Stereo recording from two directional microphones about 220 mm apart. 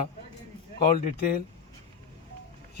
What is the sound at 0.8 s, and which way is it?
Speech, 40° left (ahead or behind).